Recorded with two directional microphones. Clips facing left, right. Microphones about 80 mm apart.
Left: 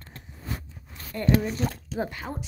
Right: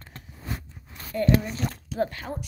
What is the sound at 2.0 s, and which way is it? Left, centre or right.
Speech, centre.